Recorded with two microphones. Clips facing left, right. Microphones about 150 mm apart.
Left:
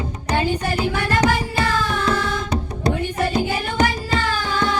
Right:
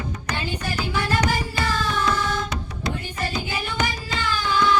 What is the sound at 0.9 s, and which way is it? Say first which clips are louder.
Music: left 2 dB; 60° left (ahead or behind).